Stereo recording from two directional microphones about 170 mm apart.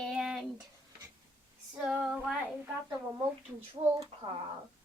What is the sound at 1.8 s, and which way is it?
Child singing, 5° right (ahead or behind).